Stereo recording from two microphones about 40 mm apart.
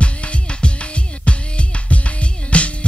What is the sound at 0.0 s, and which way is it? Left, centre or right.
Music, left.